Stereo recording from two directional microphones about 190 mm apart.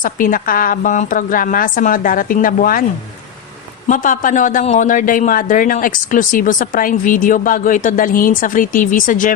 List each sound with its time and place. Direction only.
0.0 s speech: 45° left (ahead or behind)
3.8 s speech: 40° left (ahead or behind)